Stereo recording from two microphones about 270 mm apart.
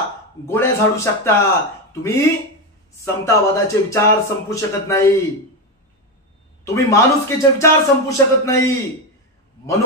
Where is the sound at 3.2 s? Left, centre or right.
Centre.